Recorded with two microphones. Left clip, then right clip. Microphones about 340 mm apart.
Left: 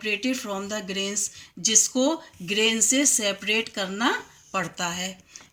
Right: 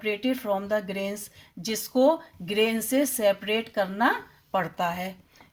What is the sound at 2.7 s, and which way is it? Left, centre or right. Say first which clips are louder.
Speech: left 4 dB; right.